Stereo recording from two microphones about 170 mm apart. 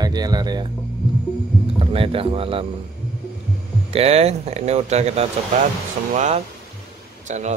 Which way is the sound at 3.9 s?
35° right (ahead or behind).